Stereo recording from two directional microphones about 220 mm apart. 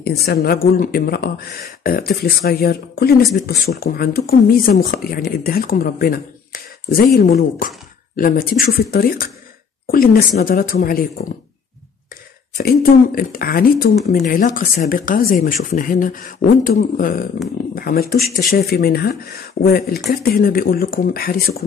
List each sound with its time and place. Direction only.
0.2 s speech: 45° left (ahead or behind)
12.5 s speech: 40° left (ahead or behind)